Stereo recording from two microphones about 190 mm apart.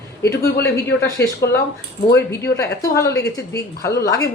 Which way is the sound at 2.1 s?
15° left (ahead or behind).